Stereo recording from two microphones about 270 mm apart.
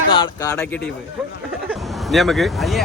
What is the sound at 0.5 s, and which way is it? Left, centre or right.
A man's voice, centre.